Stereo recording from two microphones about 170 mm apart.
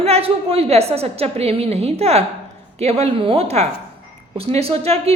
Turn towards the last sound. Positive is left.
turn(degrees=-35)  # may be behind; listen again after turning